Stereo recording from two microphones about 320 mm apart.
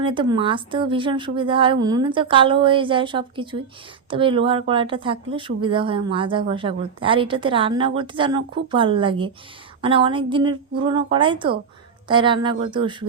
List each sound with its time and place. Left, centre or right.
0.0 s speech: centre